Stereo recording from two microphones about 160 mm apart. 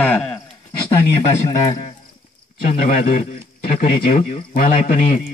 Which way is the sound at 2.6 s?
60° left (ahead or behind).